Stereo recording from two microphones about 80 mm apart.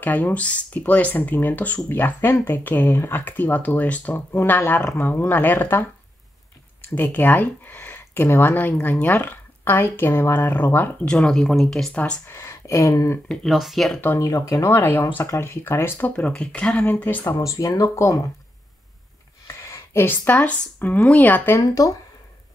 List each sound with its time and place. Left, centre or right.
0.0 s speech: left
7.0 s speech: left
11.1 s speech: centre
11.9 s speech: centre
12.4 s a sound: left
13.3 s speech: centre
14.2 s speech: left
14.7 s speech: left
15.2 s a sound: left
16.1 s speech: centre
17.4 s speech: left
19.4 s a sound: left
20.1 s speech: left
21.5 s speech: left